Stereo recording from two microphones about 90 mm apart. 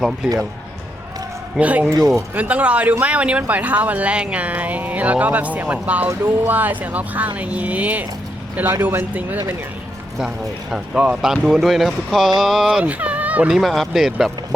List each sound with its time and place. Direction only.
1.5 s speech: 15° right (ahead or behind)
10.2 s speech: 5° right (ahead or behind)
12.8 s speech: 15° right (ahead or behind)
13.5 s speech: centre (ahead or behind)